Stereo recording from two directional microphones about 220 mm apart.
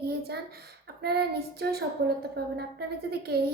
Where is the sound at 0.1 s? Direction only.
45° right (ahead or behind).